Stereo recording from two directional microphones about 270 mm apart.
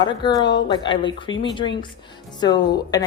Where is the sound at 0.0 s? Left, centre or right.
Centre.